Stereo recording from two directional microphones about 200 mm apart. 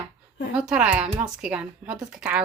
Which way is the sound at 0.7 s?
5° right (ahead or behind).